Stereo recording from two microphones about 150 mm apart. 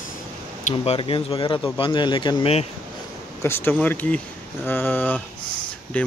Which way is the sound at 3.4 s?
15° left (ahead or behind).